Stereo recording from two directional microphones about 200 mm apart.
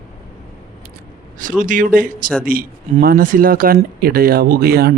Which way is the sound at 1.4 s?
40° right (ahead or behind).